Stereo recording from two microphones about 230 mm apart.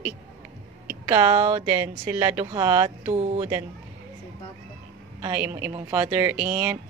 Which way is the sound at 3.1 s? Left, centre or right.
Right.